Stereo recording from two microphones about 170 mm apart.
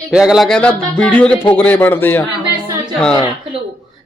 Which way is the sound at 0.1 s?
5° right (ahead or behind).